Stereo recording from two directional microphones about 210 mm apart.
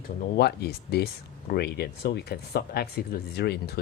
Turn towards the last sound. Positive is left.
turn(degrees=50)  # may be behind; listen again after turning